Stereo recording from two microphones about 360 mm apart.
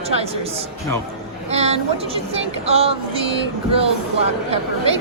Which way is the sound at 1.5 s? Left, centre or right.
Centre.